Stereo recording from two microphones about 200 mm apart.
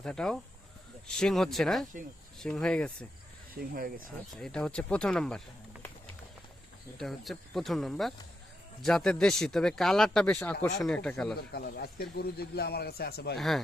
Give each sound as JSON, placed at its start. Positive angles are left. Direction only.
{"t": 0.0, "sound": "speech", "side_deg": 5}
{"t": 3.5, "sound": "speech", "side_deg": -45}
{"t": 4.4, "sound": "speech", "side_deg": 5}
{"t": 7.0, "sound": "speech", "side_deg": 0}
{"t": 11.3, "sound": "a man's voice", "side_deg": 50}